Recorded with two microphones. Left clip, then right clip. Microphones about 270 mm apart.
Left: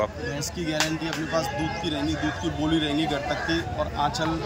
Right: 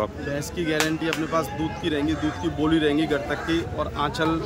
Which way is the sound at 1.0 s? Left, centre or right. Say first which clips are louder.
Right 2 dB; centre.